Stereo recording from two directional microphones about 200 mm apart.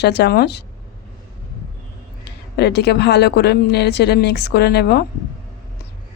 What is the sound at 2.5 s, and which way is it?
Speech, 55° left (ahead or behind).